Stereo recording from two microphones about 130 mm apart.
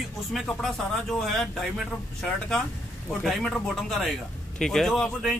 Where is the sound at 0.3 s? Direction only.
Centre (ahead or behind).